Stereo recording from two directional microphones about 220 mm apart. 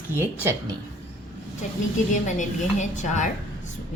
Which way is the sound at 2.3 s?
35° left (ahead or behind).